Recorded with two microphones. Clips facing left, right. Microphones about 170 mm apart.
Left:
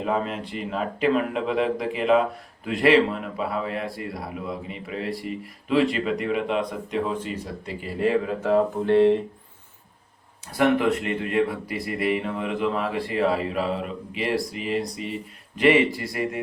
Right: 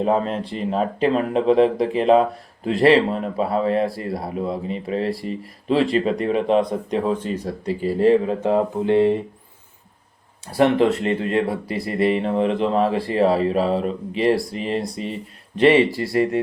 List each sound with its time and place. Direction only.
0.0 s speech: 35° right (ahead or behind)
8.9 s speech: 10° right (ahead or behind)
10.4 s speech: 30° right (ahead or behind)